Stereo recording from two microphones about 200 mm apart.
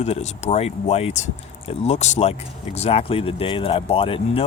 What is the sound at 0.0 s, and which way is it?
Speech, 35° left (ahead or behind).